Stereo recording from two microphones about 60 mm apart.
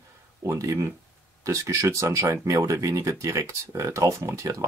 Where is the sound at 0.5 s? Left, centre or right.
Right.